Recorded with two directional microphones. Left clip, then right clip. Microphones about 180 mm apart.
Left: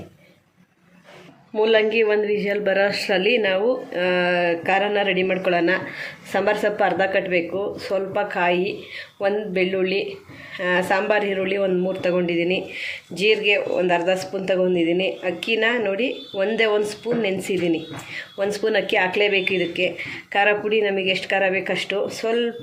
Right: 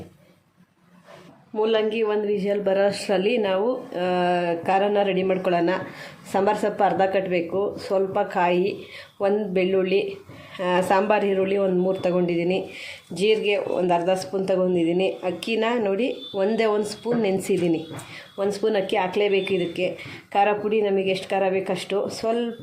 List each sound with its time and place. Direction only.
1.5 s speech: 20° right (ahead or behind); by 22.4 s 35° right (ahead or behind)